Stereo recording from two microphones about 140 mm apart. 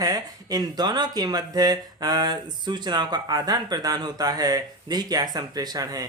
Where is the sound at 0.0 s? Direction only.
25° right (ahead or behind).